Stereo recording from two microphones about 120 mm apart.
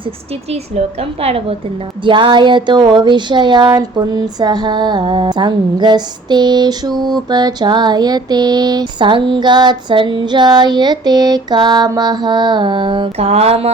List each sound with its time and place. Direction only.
0.5 s a woman's voice: 55° right (ahead or behind)
2.0 s mantra: 40° right (ahead or behind)
13.1 s a woman's voice: 60° right (ahead or behind)